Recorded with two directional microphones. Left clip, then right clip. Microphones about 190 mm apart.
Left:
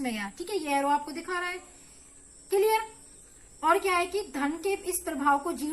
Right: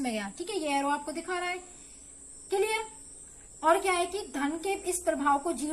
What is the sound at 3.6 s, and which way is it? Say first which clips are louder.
A woman's voice: left 1 dB; 50° right (ahead or behind).